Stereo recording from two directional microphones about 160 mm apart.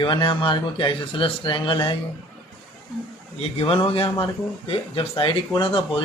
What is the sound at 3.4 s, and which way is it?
Speech, 35° left (ahead or behind).